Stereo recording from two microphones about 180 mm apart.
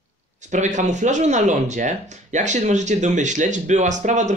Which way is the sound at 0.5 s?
40° right (ahead or behind).